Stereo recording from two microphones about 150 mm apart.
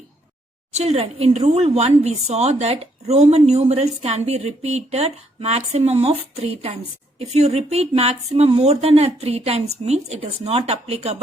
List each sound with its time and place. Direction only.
0.7 s speech: 45° right (ahead or behind)